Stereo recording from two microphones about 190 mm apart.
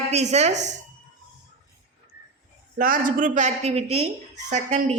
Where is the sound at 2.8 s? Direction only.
45° right (ahead or behind).